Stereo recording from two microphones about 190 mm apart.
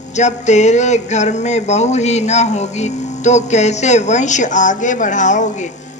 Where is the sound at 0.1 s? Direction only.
40° left (ahead or behind).